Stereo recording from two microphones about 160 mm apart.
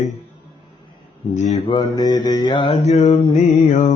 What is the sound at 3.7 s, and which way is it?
Mantra, 50° left (ahead or behind).